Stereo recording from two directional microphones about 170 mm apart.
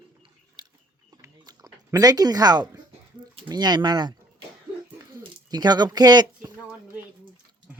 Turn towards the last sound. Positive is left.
turn(degrees=-25)  # may be behind; listen again after turning